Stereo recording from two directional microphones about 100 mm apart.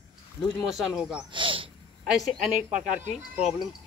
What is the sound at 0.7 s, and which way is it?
Speech, 5° right (ahead or behind).